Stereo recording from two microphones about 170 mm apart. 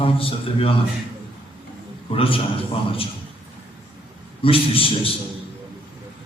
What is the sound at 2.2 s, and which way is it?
Speech, 30° left (ahead or behind).